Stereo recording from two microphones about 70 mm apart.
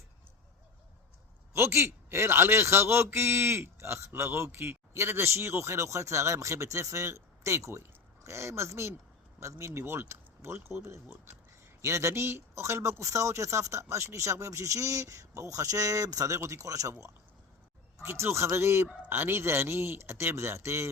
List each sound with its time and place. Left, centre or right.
1.5 s a man's voice: right
18.0 s a man's voice: right